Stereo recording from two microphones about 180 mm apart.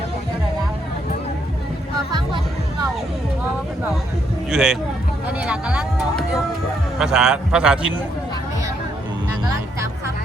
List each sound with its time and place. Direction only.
4.5 s speech: 5° right (ahead or behind)